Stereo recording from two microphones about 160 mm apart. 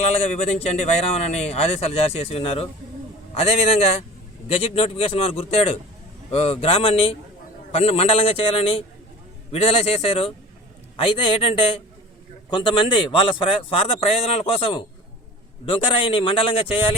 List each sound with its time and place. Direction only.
0.2 s a man's voice: 40° left (ahead or behind)